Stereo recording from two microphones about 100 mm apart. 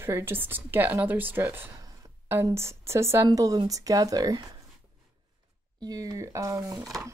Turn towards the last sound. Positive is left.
turn(degrees=-35)  # may be behind; listen again after turning